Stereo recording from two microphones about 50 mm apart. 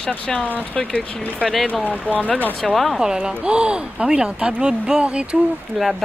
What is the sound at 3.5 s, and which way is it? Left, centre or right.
Speech, right.